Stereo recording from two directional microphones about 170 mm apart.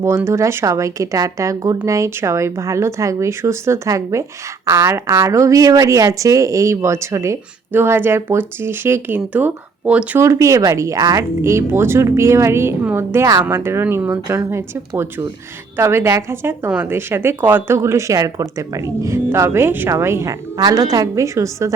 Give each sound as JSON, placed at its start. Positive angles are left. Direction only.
{"t": 0.0, "sound": "speech", "side_deg": -15}